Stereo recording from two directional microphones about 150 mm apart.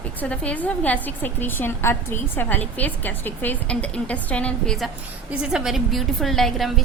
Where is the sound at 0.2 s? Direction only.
10° left (ahead or behind).